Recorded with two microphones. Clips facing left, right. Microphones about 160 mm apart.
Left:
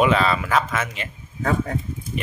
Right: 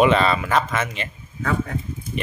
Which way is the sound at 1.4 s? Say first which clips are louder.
Left 2 dB; 40° left (ahead or behind).